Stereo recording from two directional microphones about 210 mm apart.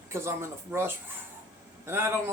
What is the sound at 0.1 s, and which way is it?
A man's voice, 10° right (ahead or behind).